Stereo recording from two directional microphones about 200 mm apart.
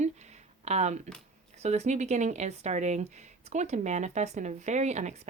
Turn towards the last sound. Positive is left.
turn(degrees=-35)  # may be behind; listen again after turning